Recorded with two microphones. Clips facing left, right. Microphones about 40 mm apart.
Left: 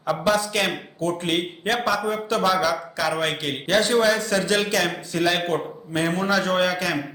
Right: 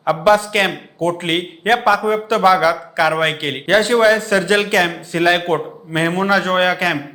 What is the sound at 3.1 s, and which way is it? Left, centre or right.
A man's voice, right.